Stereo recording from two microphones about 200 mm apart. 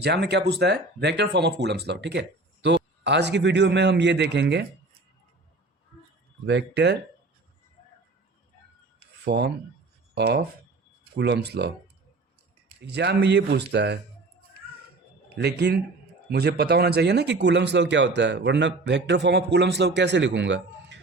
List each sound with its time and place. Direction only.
0.0 s speech: 55° right (ahead or behind)
6.4 s speech: 60° right (ahead or behind)
9.2 s speech: 55° right (ahead or behind)
12.8 s speech: 55° right (ahead or behind)
15.4 s speech: 55° right (ahead or behind)